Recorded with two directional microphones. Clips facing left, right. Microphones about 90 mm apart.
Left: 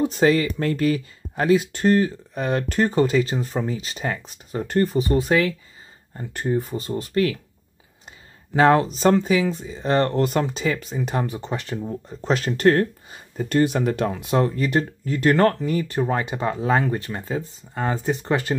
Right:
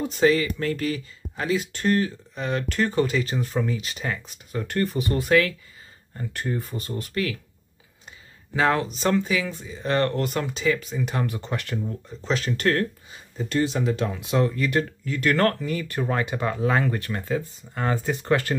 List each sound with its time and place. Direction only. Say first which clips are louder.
0.1 s speech: left 2 dB; 45° left (ahead or behind)
3.3 s speech: left 1 dB; 30° left (ahead or behind)
4.8 s speech: left 4 dB; 20° left (ahead or behind)
8.5 s speech: left 6 dB; 40° left (ahead or behind)
10.2 s speech: left 2 dB; 40° left (ahead or behind); by 12.0 s 25° left (ahead or behind)
12.2 s speech: left 4 dB; 45° left (ahead or behind)
13.4 s speech: left 4 dB; 50° left (ahead or behind); by 18.6 s 20° left (ahead or behind)